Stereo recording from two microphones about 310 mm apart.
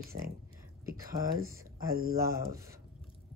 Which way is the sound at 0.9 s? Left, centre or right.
Right.